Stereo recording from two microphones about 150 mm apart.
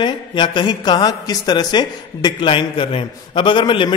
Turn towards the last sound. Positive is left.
turn(degrees=35)  # may be behind; listen again after turning